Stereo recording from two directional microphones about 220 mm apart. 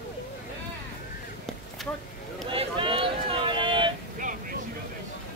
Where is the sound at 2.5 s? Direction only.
25° right (ahead or behind).